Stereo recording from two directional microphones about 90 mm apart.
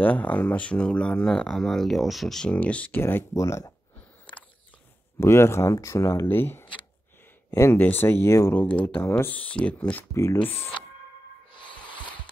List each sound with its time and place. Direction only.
0.0 s speech: 20° left (ahead or behind)
2.5 s speech: 15° left (ahead or behind)
3.3 s speech: 35° left (ahead or behind)
5.2 s speech: 30° left (ahead or behind)
8.5 s speech: 20° left (ahead or behind)
10.1 s speech: 30° left (ahead or behind)